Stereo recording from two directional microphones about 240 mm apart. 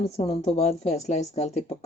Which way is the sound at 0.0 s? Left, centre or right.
Left.